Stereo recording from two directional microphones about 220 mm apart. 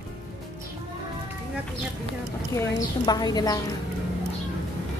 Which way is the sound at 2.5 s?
15° left (ahead or behind).